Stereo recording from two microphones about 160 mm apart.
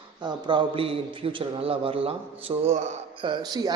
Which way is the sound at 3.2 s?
30° right (ahead or behind).